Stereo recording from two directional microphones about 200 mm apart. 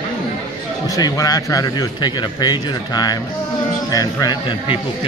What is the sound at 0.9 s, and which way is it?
Speech, 20° left (ahead or behind).